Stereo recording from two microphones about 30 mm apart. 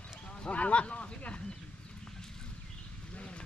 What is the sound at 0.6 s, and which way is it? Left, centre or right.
Speech, left.